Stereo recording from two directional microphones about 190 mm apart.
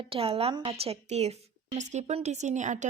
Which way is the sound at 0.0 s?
30° right (ahead or behind).